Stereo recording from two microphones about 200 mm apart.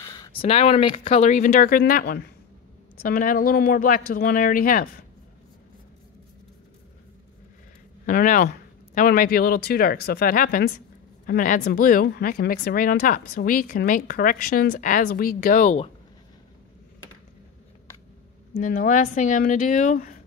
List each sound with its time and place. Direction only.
0.0 s speech: 20° left (ahead or behind); by 4.8 s 45° left (ahead or behind)
8.0 s speech: 45° left (ahead or behind)
18.5 s speech: 40° left (ahead or behind)